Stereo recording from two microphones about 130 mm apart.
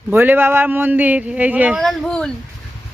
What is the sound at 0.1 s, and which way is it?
Speech, 15° right (ahead or behind).